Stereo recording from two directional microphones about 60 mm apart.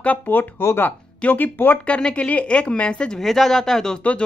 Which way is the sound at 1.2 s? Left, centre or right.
Left.